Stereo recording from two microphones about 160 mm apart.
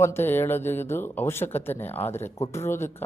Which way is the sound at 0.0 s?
15° left (ahead or behind).